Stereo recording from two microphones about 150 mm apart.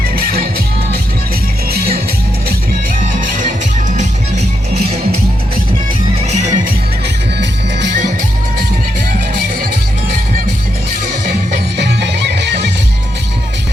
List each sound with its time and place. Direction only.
1.7 s music: 90° right
3.2 s music: 60° right (ahead or behind)
3.9 s music: 50° right (ahead or behind)
6.1 s music: 45° right (ahead or behind)